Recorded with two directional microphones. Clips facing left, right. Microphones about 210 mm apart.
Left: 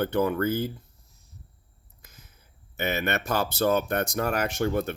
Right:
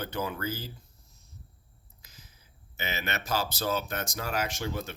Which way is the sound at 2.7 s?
55° left (ahead or behind).